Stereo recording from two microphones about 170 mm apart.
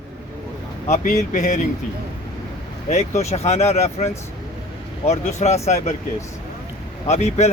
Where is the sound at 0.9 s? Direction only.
45° left (ahead or behind).